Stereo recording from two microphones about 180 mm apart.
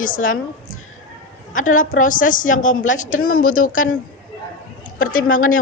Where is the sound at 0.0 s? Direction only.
50° left (ahead or behind).